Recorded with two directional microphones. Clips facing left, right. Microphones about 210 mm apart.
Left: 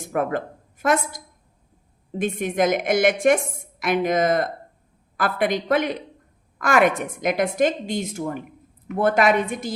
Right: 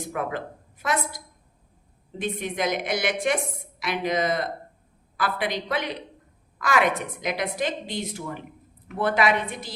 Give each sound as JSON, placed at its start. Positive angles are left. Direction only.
{"t": 0.1, "sound": "a woman's voice", "side_deg": 50}